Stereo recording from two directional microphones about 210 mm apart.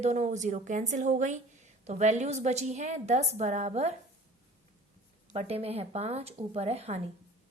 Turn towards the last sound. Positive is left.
turn(degrees=-30)  # may be behind; listen again after turning